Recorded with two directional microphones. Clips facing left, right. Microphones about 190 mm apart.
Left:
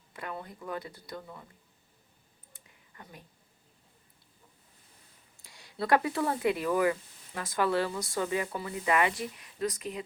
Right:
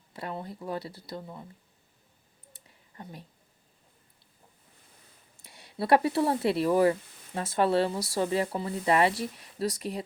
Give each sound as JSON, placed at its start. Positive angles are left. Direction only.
{"t": 0.1, "sound": "speech", "side_deg": -30}
{"t": 2.9, "sound": "speech", "side_deg": -30}
{"t": 5.7, "sound": "speech", "side_deg": -30}